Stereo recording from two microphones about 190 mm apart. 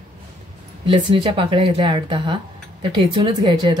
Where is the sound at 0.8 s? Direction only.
25° right (ahead or behind).